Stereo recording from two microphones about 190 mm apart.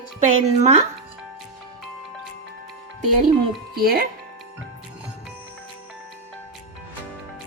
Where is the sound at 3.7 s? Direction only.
55° right (ahead or behind).